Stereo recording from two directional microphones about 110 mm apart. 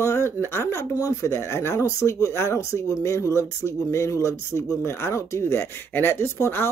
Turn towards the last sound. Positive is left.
turn(degrees=20)  # may be behind; listen again after turning